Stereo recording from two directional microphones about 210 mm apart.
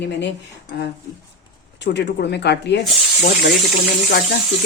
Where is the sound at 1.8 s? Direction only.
55° left (ahead or behind).